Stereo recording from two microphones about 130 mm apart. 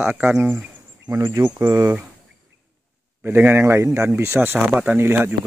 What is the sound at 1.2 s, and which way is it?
Speech, 25° right (ahead or behind).